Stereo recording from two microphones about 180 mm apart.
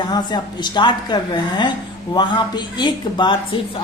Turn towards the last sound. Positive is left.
turn(degrees=25)  # may be behind; listen again after turning